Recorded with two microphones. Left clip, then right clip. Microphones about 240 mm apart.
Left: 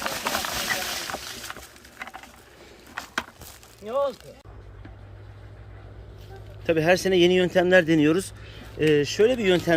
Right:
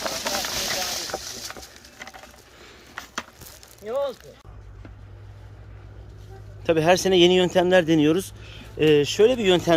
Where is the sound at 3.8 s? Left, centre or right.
Left.